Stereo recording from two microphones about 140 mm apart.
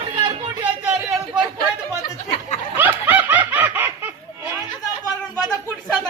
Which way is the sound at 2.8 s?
15° right (ahead or behind).